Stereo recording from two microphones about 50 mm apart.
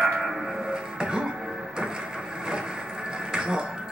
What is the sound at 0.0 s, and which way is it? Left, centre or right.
Music, centre.